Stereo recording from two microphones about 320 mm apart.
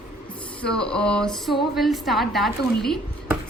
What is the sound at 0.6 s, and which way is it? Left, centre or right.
A woman's voice, centre.